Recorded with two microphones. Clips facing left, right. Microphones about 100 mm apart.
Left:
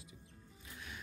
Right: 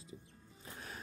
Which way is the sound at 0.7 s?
40° right (ahead or behind).